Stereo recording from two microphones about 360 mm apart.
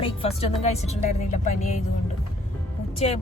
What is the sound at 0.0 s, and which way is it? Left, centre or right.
Speech, centre.